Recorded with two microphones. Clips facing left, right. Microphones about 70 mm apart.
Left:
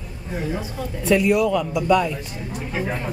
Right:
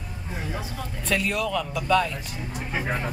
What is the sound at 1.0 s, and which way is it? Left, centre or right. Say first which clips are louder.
Speech: left 9 dB; centre.